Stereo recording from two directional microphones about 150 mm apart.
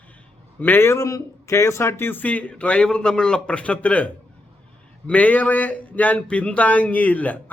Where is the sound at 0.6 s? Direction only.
15° left (ahead or behind).